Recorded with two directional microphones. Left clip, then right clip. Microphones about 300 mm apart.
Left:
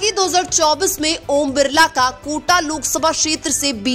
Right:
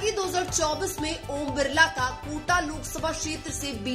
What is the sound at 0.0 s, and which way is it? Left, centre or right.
Speech, left.